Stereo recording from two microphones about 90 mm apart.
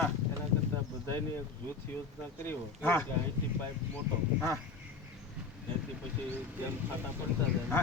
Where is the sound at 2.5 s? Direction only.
25° left (ahead or behind).